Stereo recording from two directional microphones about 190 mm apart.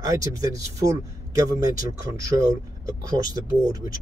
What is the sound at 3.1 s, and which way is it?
Speech, 20° right (ahead or behind).